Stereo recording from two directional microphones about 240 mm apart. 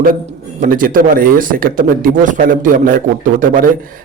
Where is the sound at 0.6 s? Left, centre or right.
Right.